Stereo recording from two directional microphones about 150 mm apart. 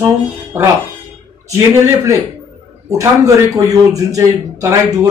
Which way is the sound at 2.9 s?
20° right (ahead or behind).